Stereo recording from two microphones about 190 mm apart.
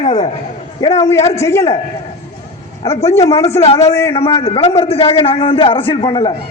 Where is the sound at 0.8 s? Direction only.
20° left (ahead or behind).